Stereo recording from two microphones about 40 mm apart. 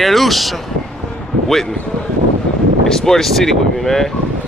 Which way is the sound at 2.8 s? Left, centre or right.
Centre.